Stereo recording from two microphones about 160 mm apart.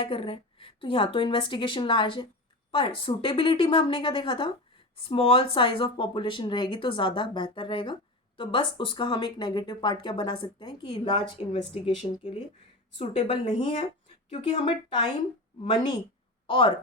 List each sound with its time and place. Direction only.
0.0 s speech: 35° left (ahead or behind)
13.0 s speech: 40° left (ahead or behind)